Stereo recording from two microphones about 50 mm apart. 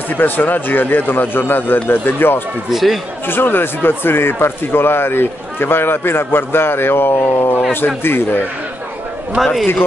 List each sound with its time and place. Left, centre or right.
0.1 s speech: left
2.7 s a man's voice: centre
3.3 s speech: left
9.4 s a man's voice: centre